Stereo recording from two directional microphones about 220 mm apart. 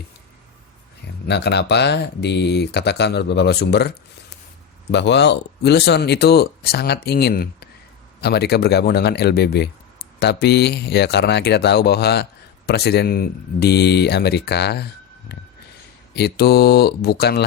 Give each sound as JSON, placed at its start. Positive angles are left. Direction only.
{"t": 1.0, "sound": "speech", "side_deg": 50}